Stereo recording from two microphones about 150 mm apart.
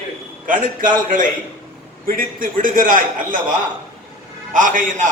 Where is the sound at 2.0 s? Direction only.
70° right (ahead or behind).